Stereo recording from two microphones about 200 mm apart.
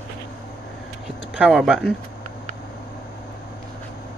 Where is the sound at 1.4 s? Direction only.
5° right (ahead or behind).